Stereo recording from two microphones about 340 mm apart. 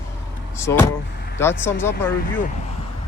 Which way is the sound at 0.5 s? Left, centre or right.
Centre.